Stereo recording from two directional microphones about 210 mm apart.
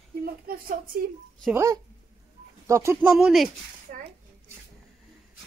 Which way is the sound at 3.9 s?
40° right (ahead or behind).